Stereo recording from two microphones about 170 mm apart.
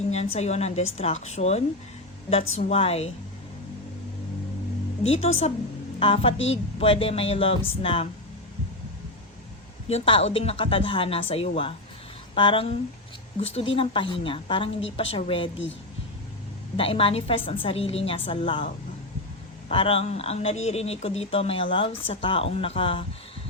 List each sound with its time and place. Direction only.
0.1 s speech: 40° left (ahead or behind)
5.2 s speech: 40° left (ahead or behind)
9.9 s speech: 35° left (ahead or behind)
16.7 s speech: 30° left (ahead or behind)
19.7 s speech: 35° left (ahead or behind)